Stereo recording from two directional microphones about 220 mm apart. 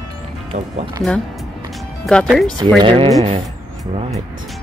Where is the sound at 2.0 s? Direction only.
Centre (ahead or behind).